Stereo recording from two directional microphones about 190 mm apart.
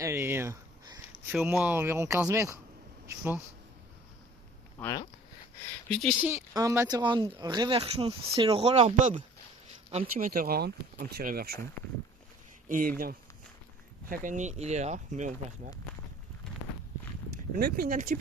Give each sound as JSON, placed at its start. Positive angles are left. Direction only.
{"t": 0.0, "sound": "speech", "side_deg": -15}
{"t": 4.8, "sound": "speech", "side_deg": 15}
{"t": 5.9, "sound": "speech", "side_deg": 0}
{"t": 6.2, "sound": "speech", "side_deg": -15}
{"t": 12.6, "sound": "speech", "side_deg": -45}
{"t": 14.1, "sound": "speech", "side_deg": -45}
{"t": 17.3, "sound": "speech", "side_deg": -55}